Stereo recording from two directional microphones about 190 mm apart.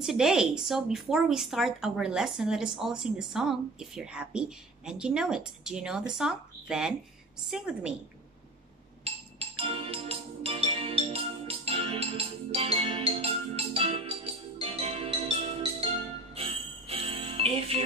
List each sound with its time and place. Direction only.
0.0 s a woman's voice: centre (ahead or behind)
9.0 s music: 30° right (ahead or behind)
16.3 s jingle bell: 30° right (ahead or behind)